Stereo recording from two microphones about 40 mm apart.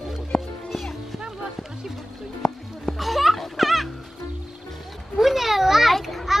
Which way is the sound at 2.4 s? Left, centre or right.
Centre.